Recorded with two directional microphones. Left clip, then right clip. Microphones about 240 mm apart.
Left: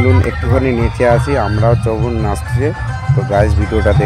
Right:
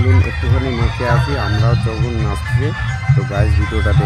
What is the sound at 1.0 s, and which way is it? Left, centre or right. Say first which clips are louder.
Speech: left 7 dB; centre.